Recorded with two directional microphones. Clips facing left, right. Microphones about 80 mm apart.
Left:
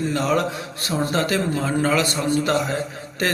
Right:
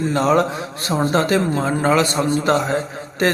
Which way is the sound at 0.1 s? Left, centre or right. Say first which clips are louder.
Right 7 dB; right.